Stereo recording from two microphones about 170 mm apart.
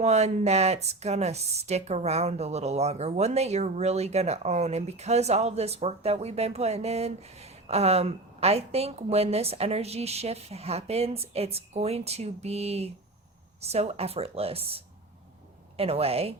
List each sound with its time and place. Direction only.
0.0 s speech: 40° right (ahead or behind)